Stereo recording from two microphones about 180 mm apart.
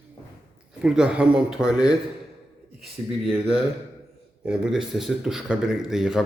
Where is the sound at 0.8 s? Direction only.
5° right (ahead or behind).